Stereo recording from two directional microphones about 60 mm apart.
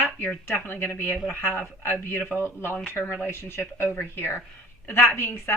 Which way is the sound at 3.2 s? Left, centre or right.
Left.